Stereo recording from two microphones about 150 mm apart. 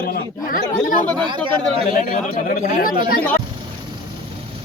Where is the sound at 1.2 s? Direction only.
30° right (ahead or behind).